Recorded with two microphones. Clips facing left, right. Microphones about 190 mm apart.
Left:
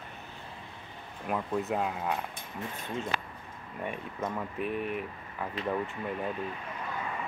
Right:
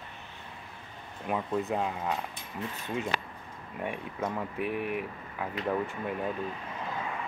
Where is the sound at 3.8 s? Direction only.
10° right (ahead or behind).